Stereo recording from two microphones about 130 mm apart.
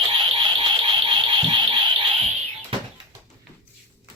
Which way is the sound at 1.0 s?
40° right (ahead or behind).